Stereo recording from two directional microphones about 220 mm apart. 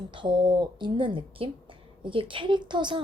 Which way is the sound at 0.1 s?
20° right (ahead or behind).